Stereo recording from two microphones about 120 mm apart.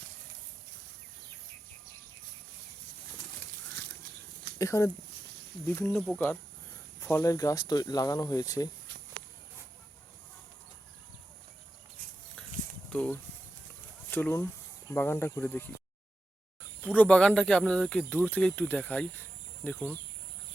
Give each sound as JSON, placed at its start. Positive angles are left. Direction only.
{"t": 4.5, "sound": "speech", "side_deg": 25}
{"t": 5.8, "sound": "speech", "side_deg": 5}
{"t": 6.1, "sound": "speech", "side_deg": 15}
{"t": 12.4, "sound": "a sound", "side_deg": 10}
{"t": 12.9, "sound": "speech", "side_deg": 10}
{"t": 16.8, "sound": "speech", "side_deg": 10}